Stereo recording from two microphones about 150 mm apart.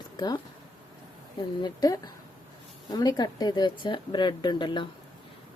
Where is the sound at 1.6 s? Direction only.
25° left (ahead or behind).